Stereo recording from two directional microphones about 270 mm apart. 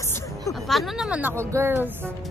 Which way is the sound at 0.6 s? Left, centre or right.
Centre.